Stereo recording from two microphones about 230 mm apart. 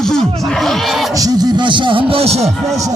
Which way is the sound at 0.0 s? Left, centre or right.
Centre.